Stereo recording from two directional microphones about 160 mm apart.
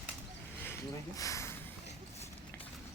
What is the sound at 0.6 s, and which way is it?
Speech, 15° left (ahead or behind).